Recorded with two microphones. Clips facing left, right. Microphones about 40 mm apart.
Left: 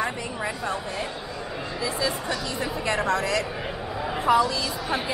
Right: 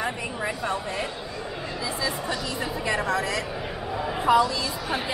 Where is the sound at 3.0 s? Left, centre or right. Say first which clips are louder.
Left 4 dB; centre.